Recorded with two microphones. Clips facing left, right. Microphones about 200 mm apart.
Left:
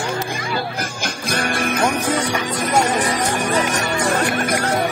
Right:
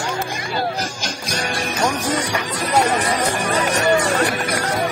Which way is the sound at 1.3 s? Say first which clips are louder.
Left 4 dB; 55° left (ahead or behind).